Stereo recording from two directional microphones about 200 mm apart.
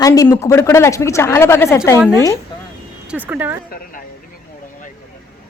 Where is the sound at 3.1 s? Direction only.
10° right (ahead or behind).